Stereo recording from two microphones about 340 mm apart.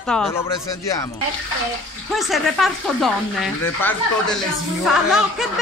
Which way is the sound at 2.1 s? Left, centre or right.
Centre.